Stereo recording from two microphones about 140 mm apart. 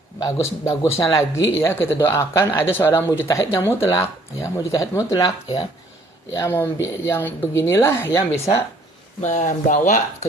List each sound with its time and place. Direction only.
0.2 s speech: 25° left (ahead or behind)
9.2 s speech: 65° left (ahead or behind)